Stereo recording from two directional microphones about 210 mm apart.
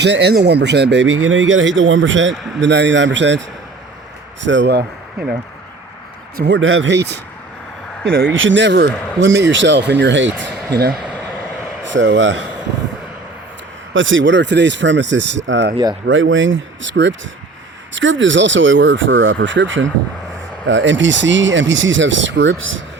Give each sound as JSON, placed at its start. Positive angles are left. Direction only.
{"t": 0.0, "sound": "speech", "side_deg": -55}
{"t": 4.4, "sound": "speech", "side_deg": -60}
{"t": 6.3, "sound": "speech", "side_deg": -55}
{"t": 8.1, "sound": "speech", "side_deg": -60}
{"t": 11.9, "sound": "speech", "side_deg": -60}
{"t": 13.9, "sound": "speech", "side_deg": -65}
{"t": 15.7, "sound": "speech", "side_deg": -20}
{"t": 16.0, "sound": "speech", "side_deg": -65}